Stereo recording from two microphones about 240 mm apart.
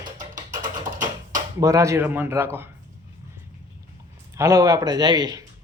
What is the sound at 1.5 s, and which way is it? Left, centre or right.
A man's voice, centre.